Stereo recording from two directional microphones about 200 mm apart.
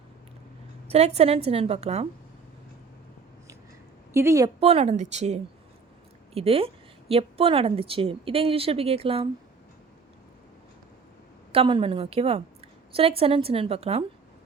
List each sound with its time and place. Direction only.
0.9 s a woman's voice: 30° right (ahead or behind)
4.1 s a woman's voice: 15° right (ahead or behind)
4.6 s a woman's voice: 30° right (ahead or behind)
11.5 s speech: 25° right (ahead or behind)